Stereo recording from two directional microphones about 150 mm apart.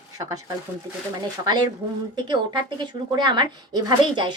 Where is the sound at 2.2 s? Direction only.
30° right (ahead or behind).